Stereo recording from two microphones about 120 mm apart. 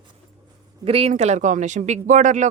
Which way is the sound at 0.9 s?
55° right (ahead or behind).